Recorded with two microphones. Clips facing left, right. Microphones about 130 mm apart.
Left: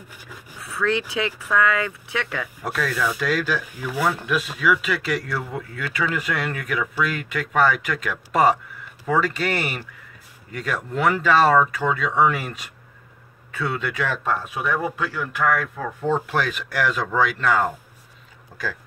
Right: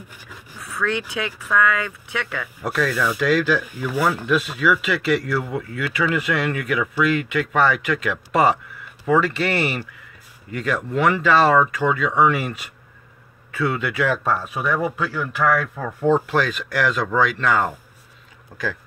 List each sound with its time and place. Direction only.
0.7 s speech: 30° left (ahead or behind)
2.6 s speech: 5° right (ahead or behind)
13.6 s speech: 10° right (ahead or behind)
16.3 s speech: 10° left (ahead or behind)